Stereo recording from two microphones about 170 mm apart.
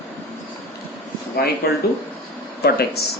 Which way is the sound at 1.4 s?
70° left (ahead or behind).